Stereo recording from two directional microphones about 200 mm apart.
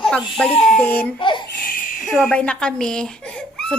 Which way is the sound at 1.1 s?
25° left (ahead or behind).